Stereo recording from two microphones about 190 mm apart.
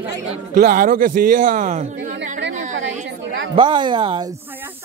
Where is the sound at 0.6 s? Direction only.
50° right (ahead or behind).